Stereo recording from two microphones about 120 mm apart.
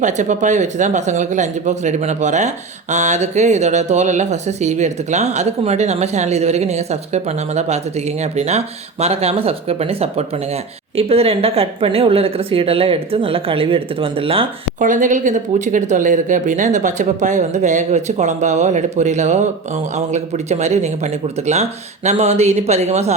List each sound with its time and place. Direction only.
0.0 s speech: 85° right; by 14.4 s 50° right (ahead or behind)
14.8 s speech: 90° right; by 23.1 s 65° right (ahead or behind)